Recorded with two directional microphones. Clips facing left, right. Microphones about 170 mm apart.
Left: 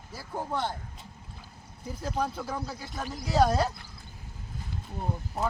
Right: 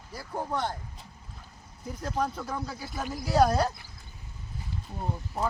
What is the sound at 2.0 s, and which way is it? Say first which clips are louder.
Speech: even; 5° left (ahead or behind).